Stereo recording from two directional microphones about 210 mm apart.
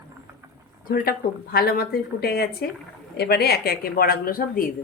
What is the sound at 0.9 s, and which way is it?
Speech, 45° left (ahead or behind).